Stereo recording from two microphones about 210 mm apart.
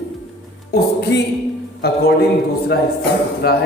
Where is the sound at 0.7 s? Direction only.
55° left (ahead or behind).